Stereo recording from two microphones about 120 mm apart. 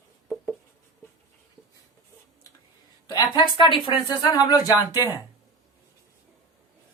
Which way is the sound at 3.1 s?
40° left (ahead or behind).